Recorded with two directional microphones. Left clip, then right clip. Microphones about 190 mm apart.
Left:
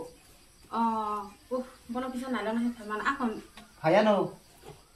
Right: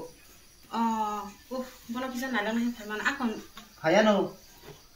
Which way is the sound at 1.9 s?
25° right (ahead or behind).